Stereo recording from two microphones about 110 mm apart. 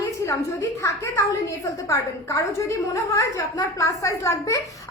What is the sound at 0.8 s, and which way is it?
A woman's voice, 30° left (ahead or behind).